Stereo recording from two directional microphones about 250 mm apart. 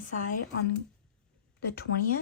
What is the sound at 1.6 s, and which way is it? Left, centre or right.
Speech, left.